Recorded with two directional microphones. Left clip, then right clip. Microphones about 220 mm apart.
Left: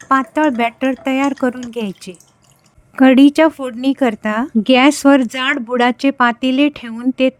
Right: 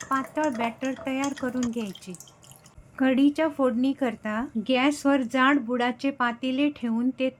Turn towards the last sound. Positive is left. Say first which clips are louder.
# left 10 dB
turn(degrees=50)  # may be behind; listen again after turning